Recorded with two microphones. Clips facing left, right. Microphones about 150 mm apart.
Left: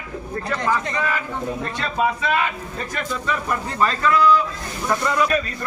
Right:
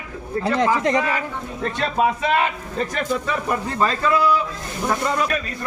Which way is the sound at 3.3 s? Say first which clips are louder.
Right 1 dB; 25° right (ahead or behind).